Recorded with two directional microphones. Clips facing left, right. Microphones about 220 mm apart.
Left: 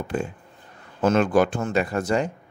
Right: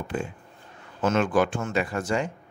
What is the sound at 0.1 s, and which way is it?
Speech, 40° left (ahead or behind).